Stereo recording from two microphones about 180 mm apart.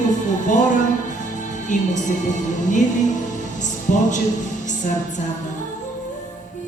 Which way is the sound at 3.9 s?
45° left (ahead or behind).